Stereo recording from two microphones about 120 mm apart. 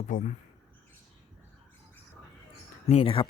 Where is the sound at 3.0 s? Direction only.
45° left (ahead or behind).